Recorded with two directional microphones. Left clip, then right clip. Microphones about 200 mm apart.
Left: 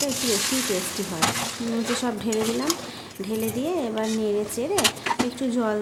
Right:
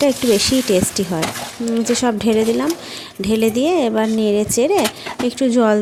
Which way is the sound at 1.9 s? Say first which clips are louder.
Right 11 dB; 35° right (ahead or behind).